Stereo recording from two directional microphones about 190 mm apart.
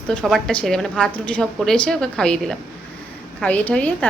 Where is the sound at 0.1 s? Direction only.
5° left (ahead or behind).